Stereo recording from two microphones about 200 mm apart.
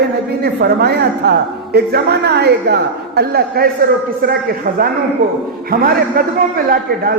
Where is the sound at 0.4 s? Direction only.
55° right (ahead or behind).